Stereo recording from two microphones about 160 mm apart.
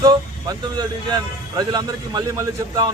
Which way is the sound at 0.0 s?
25° right (ahead or behind).